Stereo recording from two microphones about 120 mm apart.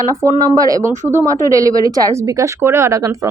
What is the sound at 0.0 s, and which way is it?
Speech, 30° right (ahead or behind).